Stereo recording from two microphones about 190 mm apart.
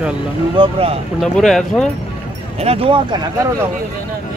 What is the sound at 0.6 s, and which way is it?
Speech, 30° right (ahead or behind).